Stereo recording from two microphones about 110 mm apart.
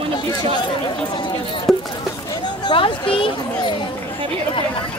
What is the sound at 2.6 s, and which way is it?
Speech, 50° left (ahead or behind).